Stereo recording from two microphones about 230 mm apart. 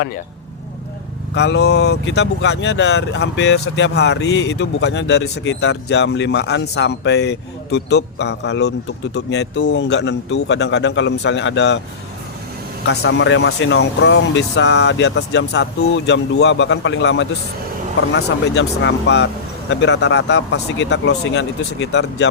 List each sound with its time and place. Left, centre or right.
1.4 s speech: left
12.9 s speech: left